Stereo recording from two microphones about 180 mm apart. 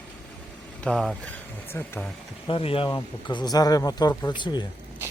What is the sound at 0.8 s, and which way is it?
Speech, 5° left (ahead or behind).